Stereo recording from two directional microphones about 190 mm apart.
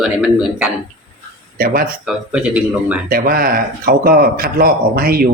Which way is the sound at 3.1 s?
50° right (ahead or behind).